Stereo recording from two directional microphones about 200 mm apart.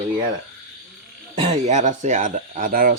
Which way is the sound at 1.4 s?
35° right (ahead or behind).